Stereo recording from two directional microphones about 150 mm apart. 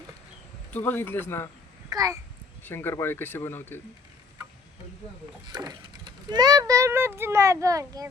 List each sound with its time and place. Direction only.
0.7 s speech: 10° left (ahead or behind)
1.9 s a child's voice: 25° right (ahead or behind)
2.6 s speech: 15° left (ahead or behind)
5.5 s speech: 25° right (ahead or behind)